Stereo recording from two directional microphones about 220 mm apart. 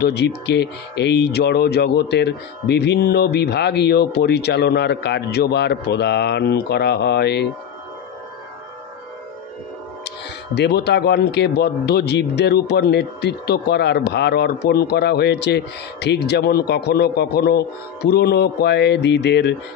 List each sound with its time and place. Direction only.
0.0 s speech: 50° left (ahead or behind)
10.5 s speech: 50° left (ahead or behind)